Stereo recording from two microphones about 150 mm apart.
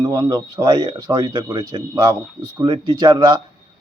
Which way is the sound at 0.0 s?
25° right (ahead or behind).